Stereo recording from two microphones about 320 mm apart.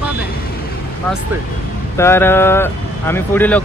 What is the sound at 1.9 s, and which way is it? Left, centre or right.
Speech, centre.